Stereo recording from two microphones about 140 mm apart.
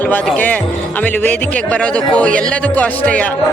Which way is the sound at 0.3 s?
10° left (ahead or behind).